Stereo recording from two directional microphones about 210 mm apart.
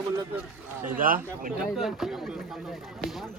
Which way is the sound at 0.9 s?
40° right (ahead or behind).